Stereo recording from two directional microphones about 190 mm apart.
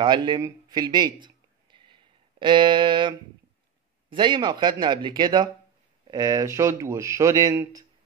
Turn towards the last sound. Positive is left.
turn(degrees=-15)  # may be behind; listen again after turning